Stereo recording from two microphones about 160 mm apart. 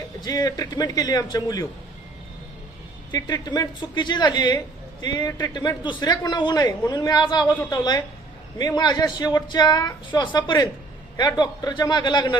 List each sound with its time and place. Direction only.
0.2 s speech: 25° left (ahead or behind)
3.1 s speech: 25° left (ahead or behind)